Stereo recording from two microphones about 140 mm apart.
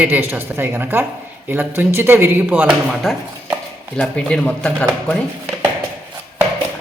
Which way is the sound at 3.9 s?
5° left (ahead or behind).